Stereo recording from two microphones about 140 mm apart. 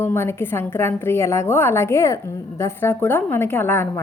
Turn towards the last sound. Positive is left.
turn(degrees=15)  # may be behind; listen again after turning